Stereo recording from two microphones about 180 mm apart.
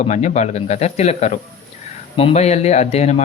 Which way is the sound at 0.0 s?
40° left (ahead or behind).